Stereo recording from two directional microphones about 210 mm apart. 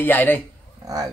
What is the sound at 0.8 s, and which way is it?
Speech, 15° right (ahead or behind).